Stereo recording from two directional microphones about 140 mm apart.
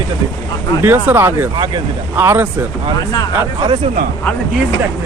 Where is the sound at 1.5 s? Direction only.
35° right (ahead or behind).